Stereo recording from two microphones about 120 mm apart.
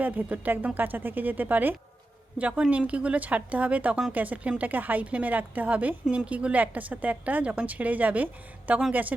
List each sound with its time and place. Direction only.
0.0 s a woman's voice: 15° right (ahead or behind)